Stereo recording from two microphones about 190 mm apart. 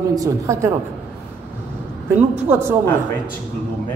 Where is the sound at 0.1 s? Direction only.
15° right (ahead or behind).